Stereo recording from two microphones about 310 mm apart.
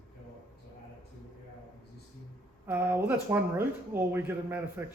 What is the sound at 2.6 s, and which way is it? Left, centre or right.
Speech, centre.